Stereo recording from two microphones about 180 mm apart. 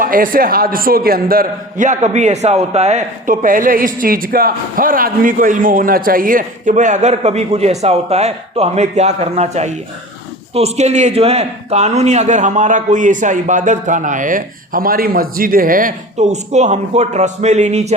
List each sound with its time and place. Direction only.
0.0 s a man's voice: 50° right (ahead or behind)